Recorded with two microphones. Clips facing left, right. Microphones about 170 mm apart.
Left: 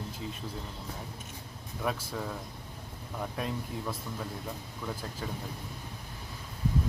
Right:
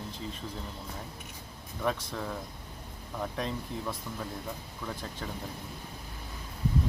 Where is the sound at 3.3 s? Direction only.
5° left (ahead or behind).